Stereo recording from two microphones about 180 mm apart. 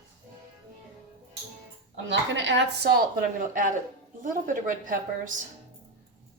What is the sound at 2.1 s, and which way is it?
Speech, 90° right.